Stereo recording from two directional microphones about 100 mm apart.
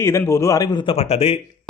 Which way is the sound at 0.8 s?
85° left.